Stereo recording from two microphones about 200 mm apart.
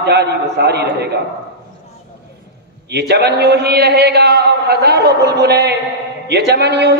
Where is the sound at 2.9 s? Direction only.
55° right (ahead or behind).